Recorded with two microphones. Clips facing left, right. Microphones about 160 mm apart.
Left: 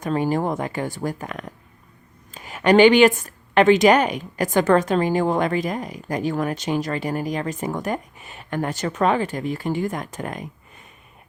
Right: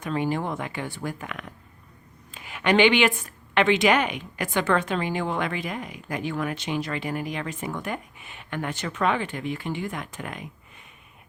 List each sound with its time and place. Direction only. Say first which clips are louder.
0.0 s a woman's voice: left 5 dB; 40° left (ahead or behind)